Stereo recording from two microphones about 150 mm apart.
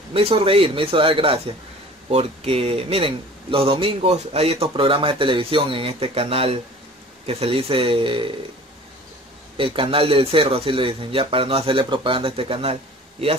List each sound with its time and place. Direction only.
0.1 s speech: 40° right (ahead or behind)
9.6 s speech: 35° right (ahead or behind)